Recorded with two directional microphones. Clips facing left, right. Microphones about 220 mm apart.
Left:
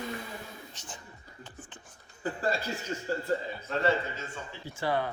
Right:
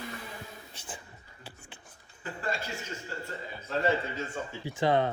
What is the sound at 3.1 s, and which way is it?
Speech, 40° left (ahead or behind).